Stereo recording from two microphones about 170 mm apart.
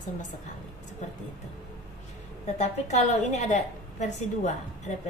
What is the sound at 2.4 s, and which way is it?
A woman's voice, 40° left (ahead or behind).